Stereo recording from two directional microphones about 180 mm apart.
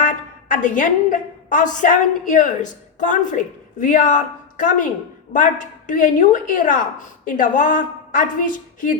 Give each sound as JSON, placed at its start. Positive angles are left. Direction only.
{"t": 0.0, "sound": "a woman's voice", "side_deg": 45}